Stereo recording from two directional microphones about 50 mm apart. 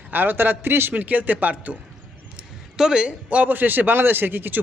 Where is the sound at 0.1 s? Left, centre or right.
Right.